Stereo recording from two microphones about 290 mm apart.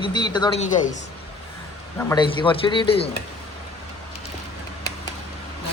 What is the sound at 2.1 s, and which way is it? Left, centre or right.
Speech, centre.